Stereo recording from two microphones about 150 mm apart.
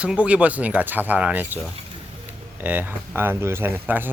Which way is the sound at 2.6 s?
10° right (ahead or behind).